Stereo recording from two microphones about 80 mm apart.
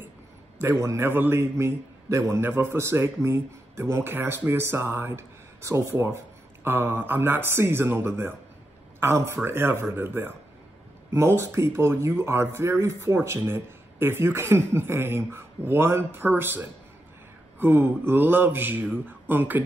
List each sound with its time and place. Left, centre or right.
0.7 s a man's voice: right